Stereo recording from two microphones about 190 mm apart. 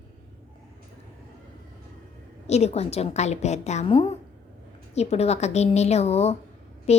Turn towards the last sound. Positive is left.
turn(degrees=35)  # may be behind; listen again after turning